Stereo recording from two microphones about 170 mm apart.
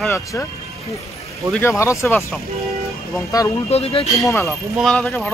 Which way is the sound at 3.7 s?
35° left (ahead or behind).